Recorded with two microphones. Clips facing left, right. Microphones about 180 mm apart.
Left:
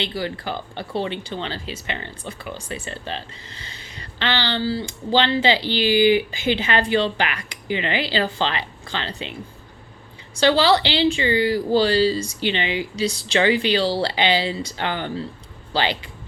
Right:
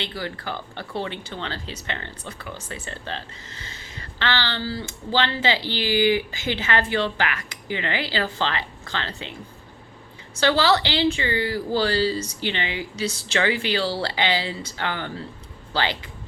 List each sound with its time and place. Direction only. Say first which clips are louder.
0.1 s speech: left 4 dB; 15° left (ahead or behind)
10.4 s speech: left 3 dB; 15° left (ahead or behind)